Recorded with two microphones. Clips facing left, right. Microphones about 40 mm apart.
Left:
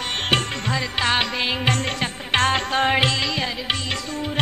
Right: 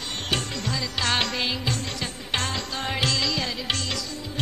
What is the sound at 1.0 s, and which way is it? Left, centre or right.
Music, left.